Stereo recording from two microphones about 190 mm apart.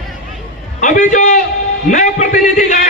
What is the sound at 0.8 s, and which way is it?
A man's voice, 40° left (ahead or behind).